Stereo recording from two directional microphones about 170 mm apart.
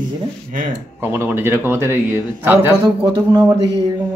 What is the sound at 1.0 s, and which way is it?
A man's voice, 15° right (ahead or behind).